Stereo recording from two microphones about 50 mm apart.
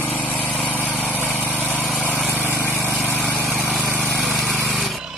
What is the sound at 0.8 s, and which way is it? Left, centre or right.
Lawn mower, left.